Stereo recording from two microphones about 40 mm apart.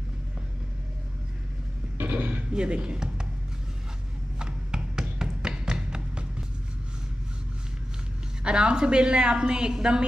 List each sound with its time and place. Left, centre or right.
2.0 s a sound: right
2.5 s a woman's voice: right
4.4 s music: right
8.5 s a woman's voice: right